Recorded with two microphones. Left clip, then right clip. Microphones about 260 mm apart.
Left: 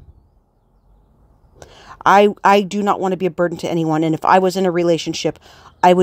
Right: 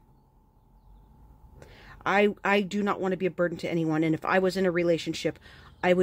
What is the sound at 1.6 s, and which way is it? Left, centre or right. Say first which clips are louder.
Speech: left 16 dB; left.